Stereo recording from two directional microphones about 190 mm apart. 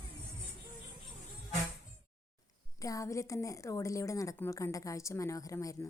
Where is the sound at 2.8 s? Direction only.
15° left (ahead or behind).